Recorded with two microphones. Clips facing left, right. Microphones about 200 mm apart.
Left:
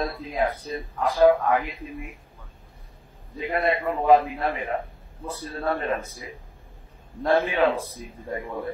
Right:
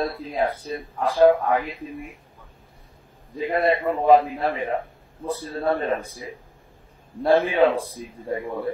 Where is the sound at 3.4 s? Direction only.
30° right (ahead or behind).